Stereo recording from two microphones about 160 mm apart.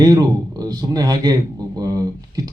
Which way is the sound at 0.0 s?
25° right (ahead or behind).